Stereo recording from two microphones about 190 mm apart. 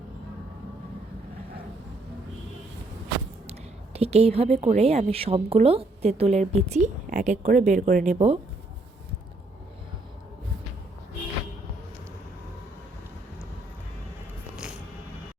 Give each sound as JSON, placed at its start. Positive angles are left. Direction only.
{"t": 3.9, "sound": "a woman's voice", "side_deg": -35}
{"t": 14.5, "sound": "music", "side_deg": -5}